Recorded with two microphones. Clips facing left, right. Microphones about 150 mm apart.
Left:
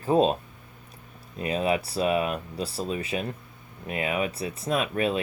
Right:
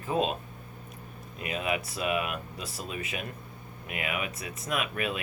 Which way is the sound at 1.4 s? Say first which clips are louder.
Left 6 dB; 35° left (ahead or behind).